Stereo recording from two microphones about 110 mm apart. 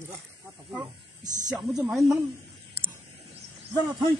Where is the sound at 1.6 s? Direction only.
5° right (ahead or behind).